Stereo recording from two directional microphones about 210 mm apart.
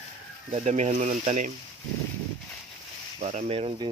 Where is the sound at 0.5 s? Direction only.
30° right (ahead or behind).